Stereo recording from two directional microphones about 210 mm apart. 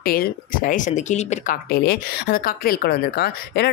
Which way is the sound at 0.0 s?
45° left (ahead or behind).